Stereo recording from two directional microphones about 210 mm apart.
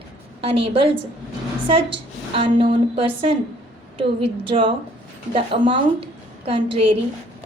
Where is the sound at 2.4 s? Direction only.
25° right (ahead or behind).